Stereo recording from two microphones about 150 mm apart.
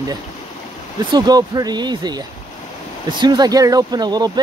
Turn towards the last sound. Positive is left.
turn(degrees=-25)  # may be behind; listen again after turning